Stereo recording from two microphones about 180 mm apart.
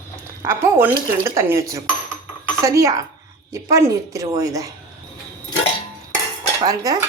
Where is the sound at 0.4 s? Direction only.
10° right (ahead or behind).